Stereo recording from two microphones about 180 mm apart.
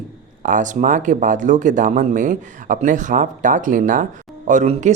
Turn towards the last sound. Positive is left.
turn(degrees=-40)  # may be behind; listen again after turning